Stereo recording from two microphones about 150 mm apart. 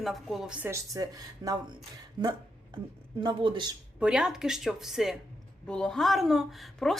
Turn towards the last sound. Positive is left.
turn(degrees=0)  # may be behind; listen again after turning